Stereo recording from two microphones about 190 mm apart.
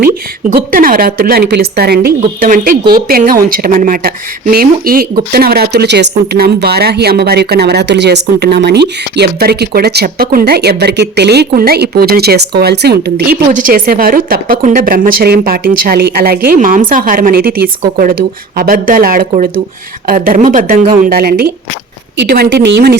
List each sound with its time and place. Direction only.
0.5 s speech: 50° right (ahead or behind)